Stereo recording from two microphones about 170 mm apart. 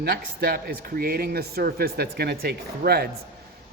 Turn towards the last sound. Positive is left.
turn(degrees=-70)  # may be behind; listen again after turning